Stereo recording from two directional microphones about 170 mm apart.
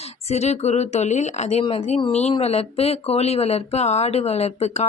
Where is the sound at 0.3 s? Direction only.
40° left (ahead or behind).